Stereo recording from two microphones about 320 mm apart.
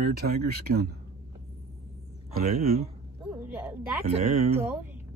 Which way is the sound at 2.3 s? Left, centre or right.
Right.